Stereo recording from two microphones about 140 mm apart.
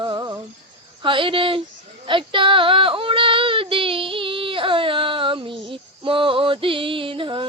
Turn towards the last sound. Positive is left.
turn(degrees=-35)  # may be behind; listen again after turning